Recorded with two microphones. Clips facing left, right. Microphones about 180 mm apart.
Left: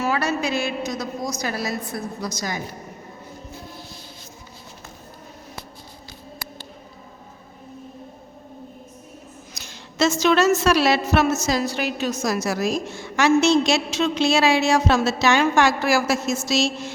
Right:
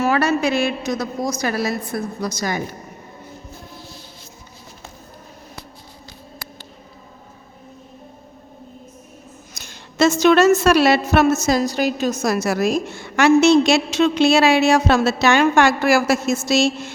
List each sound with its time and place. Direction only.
0.0 s a woman's voice: 60° right (ahead or behind)
9.6 s a woman's voice: 50° right (ahead or behind)